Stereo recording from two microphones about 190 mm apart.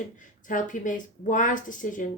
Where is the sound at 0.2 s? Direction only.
45° left (ahead or behind).